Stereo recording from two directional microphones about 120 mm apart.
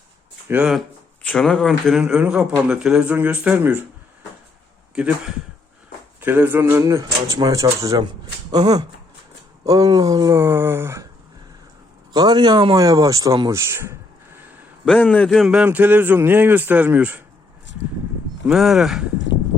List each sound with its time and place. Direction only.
0.6 s speech: centre (ahead or behind)
5.0 s speech: 10° right (ahead or behind)
6.1 s a man's voice: 15° right (ahead or behind)
12.1 s a man's voice: 35° right (ahead or behind)
12.7 s speech: 30° right (ahead or behind)
15.1 s speech: 5° left (ahead or behind)
15.5 s speech: 15° right (ahead or behind)
18.4 s speech: centre (ahead or behind)